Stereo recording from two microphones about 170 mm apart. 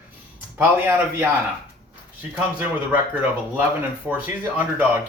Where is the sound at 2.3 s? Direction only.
10° right (ahead or behind).